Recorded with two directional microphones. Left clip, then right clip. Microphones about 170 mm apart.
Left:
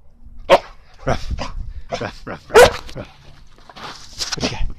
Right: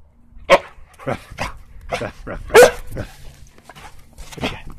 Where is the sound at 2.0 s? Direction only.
10° left (ahead or behind).